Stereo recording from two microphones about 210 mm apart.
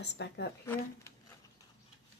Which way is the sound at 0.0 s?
55° left (ahead or behind).